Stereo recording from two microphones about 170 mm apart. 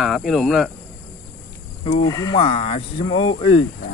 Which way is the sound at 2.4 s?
35° left (ahead or behind).